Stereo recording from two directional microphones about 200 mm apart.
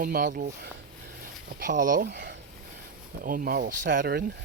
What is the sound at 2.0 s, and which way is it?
Speech, 55° right (ahead or behind).